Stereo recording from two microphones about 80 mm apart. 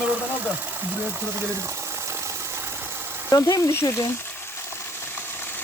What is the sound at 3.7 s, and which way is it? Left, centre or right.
Speech, left.